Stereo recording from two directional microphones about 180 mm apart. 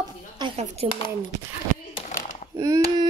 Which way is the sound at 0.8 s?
35° right (ahead or behind).